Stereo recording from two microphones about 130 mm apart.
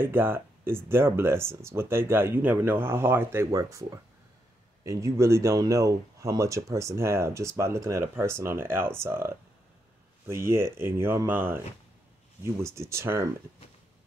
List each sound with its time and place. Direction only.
0.0 s speech: 15° right (ahead or behind)